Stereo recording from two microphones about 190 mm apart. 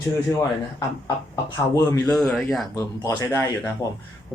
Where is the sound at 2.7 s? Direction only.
15° left (ahead or behind).